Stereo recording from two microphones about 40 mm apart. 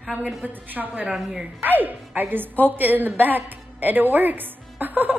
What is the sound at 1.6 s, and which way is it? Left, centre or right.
A woman's voice, right.